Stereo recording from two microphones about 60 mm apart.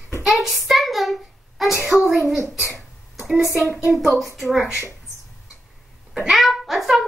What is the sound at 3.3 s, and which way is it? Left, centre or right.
A woman's voice, centre.